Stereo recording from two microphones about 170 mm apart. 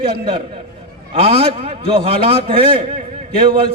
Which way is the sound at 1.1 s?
35° right (ahead or behind).